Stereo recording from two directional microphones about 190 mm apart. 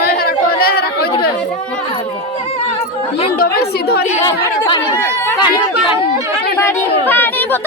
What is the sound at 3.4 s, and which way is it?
Speech, 55° left (ahead or behind).